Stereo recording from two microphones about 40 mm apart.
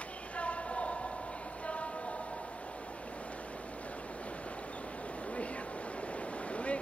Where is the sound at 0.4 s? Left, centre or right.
Left.